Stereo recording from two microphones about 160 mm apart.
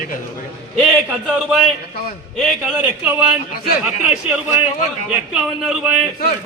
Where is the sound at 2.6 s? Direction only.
10° right (ahead or behind).